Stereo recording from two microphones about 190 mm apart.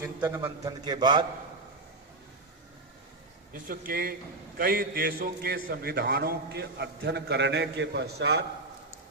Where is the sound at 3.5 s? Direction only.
50° right (ahead or behind).